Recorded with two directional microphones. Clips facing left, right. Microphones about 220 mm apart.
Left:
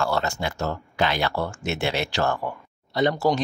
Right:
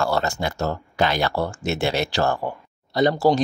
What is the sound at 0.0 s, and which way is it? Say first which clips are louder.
Speech: right 2 dB; 40° right (ahead or behind).